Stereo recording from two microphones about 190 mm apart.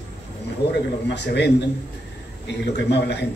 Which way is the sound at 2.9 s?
60° left (ahead or behind).